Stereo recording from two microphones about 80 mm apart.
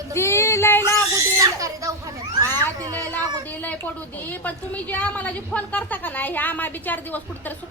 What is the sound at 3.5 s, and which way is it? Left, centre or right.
A woman's voice, left.